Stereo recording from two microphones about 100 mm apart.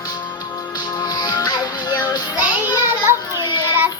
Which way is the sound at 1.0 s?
40° left (ahead or behind).